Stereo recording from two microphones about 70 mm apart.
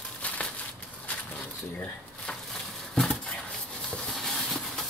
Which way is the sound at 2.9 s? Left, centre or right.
Centre.